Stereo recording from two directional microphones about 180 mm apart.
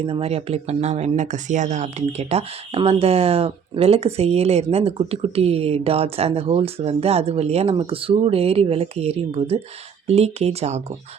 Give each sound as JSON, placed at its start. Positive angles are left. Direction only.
{"t": 0.0, "sound": "speech", "side_deg": -30}